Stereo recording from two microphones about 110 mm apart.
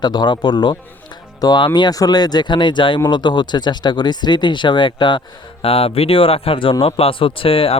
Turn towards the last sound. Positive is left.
turn(degrees=55)  # may be behind; listen again after turning